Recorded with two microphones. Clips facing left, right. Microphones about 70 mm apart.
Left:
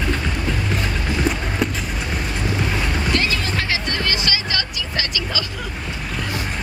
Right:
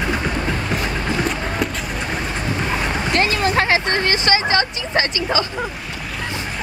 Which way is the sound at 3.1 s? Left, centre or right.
Right.